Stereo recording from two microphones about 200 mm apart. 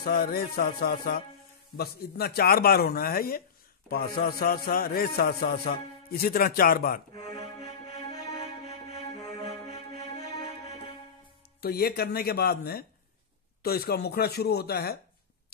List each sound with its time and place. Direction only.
0.0 s a man's voice: 50° left (ahead or behind)
9.1 s music: 20° left (ahead or behind)
11.6 s a man's voice: 50° left (ahead or behind)